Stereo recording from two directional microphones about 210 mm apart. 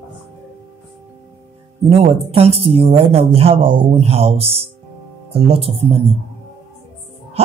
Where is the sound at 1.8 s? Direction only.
25° right (ahead or behind).